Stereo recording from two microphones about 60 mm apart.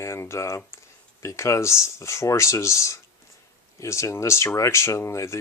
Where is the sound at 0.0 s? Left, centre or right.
Left.